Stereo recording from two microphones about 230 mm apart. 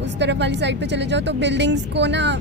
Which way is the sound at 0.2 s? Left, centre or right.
Right.